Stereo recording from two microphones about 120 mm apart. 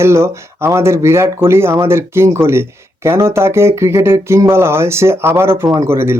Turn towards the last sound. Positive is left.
turn(degrees=-20)  # may be behind; listen again after turning